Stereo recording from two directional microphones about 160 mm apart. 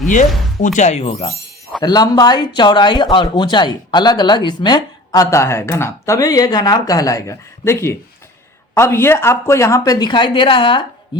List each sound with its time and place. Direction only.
0.1 s speech: 50° left (ahead or behind)
1.8 s speech: 25° left (ahead or behind)